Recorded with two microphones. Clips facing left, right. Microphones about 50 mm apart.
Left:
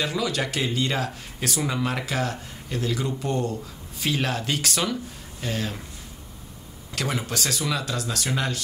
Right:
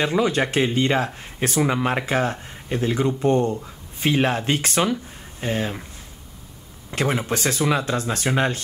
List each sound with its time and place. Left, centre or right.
0.0 s speech: right
6.9 s speech: right